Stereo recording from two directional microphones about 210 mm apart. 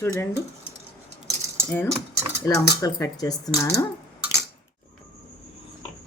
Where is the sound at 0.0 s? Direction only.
10° left (ahead or behind).